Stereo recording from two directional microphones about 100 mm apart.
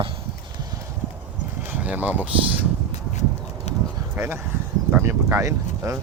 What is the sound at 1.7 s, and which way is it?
Speech, 15° right (ahead or behind).